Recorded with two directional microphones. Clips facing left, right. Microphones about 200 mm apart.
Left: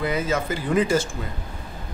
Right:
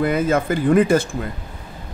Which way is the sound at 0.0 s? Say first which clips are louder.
Right 6 dB; 55° right (ahead or behind).